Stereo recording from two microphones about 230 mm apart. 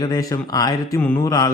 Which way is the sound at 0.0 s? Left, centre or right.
Centre.